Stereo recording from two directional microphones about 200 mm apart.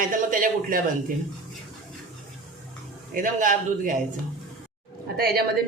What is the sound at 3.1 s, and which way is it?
Speech, 40° right (ahead or behind).